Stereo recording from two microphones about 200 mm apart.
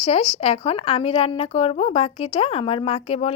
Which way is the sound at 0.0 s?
30° left (ahead or behind).